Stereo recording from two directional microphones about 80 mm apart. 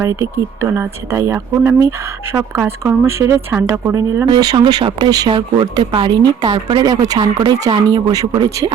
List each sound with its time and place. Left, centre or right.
0.0 s speech: right
4.3 s speech: right
5.3 s speech: right
6.8 s speech: right
7.2 s speech: right
7.6 s speech: right